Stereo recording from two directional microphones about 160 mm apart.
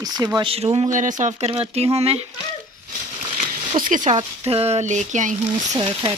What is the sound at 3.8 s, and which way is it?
Speech, 50° right (ahead or behind).